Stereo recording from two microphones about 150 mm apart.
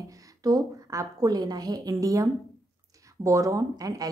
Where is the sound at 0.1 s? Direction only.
25° right (ahead or behind).